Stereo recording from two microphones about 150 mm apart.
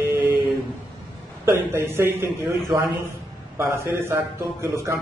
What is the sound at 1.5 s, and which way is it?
A man's voice, 15° right (ahead or behind).